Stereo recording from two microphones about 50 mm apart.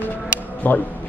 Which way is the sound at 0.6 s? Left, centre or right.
Left.